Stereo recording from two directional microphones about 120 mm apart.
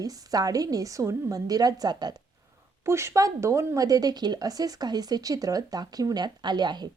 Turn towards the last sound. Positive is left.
turn(degrees=-35)  # may be behind; listen again after turning